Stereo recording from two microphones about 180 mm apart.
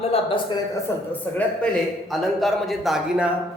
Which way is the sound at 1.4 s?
5° left (ahead or behind).